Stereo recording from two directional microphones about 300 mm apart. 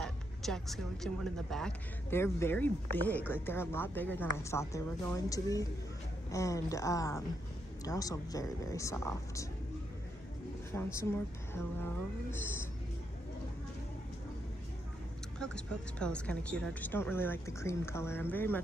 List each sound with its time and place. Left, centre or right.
0.0 s speech: centre
10.7 s speech: centre
15.3 s speech: centre